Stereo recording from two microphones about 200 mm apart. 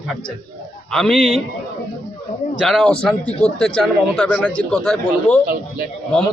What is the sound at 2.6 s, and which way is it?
A man's voice, 5° left (ahead or behind).